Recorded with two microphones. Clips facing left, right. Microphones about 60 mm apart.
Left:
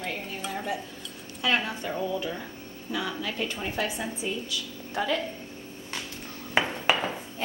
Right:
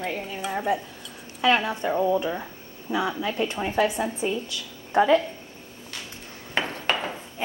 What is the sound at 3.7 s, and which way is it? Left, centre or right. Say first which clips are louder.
A woman's voice: right 7 dB; right.